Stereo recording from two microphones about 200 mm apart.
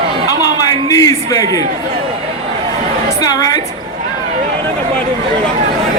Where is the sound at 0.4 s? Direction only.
15° left (ahead or behind).